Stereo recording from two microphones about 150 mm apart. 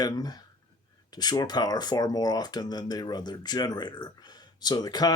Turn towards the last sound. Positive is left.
turn(degrees=25)  # may be behind; listen again after turning